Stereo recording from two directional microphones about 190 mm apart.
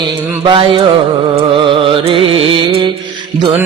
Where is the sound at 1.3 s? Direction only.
30° right (ahead or behind).